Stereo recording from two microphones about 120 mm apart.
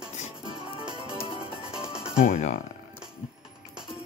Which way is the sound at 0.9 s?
40° right (ahead or behind).